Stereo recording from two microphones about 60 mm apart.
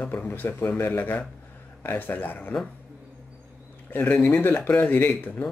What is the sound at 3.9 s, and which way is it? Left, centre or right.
Speech, left.